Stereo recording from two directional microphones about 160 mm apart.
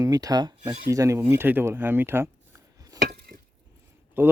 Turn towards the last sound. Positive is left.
turn(degrees=-15)  # may be behind; listen again after turning